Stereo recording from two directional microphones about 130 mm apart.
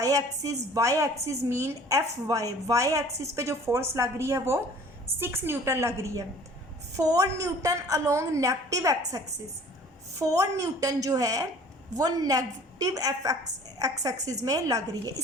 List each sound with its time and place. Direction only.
0.0 s a woman's voice: 25° right (ahead or behind)